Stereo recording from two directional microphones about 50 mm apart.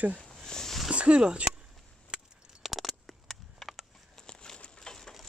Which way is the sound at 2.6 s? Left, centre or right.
Centre.